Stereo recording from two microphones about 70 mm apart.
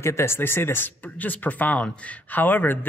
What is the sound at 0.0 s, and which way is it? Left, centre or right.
Speech, left.